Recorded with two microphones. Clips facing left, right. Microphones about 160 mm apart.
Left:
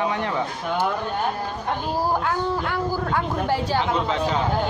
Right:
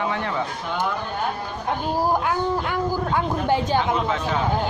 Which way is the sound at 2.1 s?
15° right (ahead or behind).